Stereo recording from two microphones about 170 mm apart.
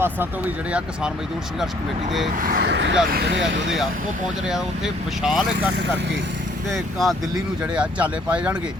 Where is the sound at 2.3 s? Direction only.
55° right (ahead or behind); by 2.9 s 85° right.